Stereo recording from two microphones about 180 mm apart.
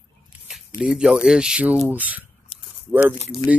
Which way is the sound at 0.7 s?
5° right (ahead or behind).